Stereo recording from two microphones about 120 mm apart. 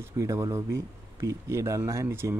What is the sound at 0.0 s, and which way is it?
Speech, 25° right (ahead or behind).